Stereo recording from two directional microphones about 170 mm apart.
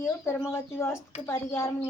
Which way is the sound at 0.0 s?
15° left (ahead or behind).